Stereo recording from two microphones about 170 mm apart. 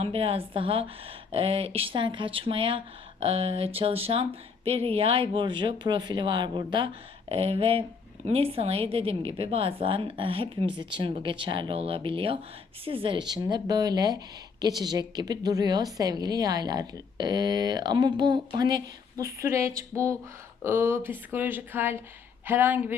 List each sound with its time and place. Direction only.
0.0 s a woman's voice: 35° right (ahead or behind); by 23.0 s 10° right (ahead or behind)